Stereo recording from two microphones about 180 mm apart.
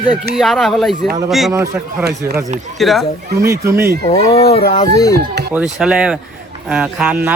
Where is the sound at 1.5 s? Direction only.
15° right (ahead or behind).